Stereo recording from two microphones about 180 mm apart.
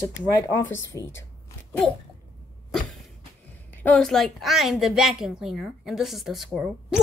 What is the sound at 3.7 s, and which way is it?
A woman's voice, 5° left (ahead or behind).